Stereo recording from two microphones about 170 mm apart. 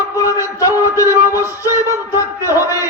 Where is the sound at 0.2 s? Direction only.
20° left (ahead or behind).